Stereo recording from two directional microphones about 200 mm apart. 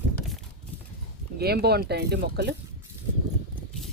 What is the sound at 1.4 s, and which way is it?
Speech, 55° right (ahead or behind).